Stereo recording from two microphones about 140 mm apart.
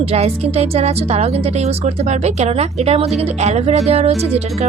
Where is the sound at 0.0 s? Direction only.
45° right (ahead or behind).